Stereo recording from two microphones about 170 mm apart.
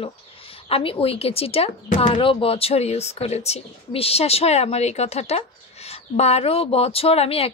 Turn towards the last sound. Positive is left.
turn(degrees=35)  # may be behind; listen again after turning